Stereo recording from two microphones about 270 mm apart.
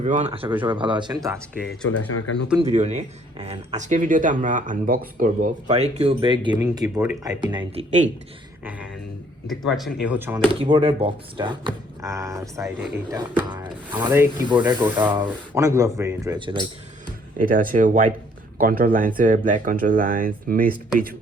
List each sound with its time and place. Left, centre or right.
0.0 s speech: right
1.6 s speech: centre
2.0 s speech: left
2.6 s speech: right
9.5 s speech: centre
10.5 s speech: centre
17.3 s speech: right